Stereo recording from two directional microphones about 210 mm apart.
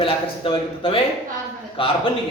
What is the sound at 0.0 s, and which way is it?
Speech, 25° left (ahead or behind).